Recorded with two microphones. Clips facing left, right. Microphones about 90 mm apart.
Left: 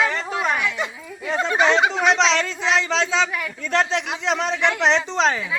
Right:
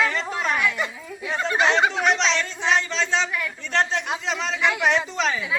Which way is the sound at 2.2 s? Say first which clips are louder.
Left 4 dB; 90° left.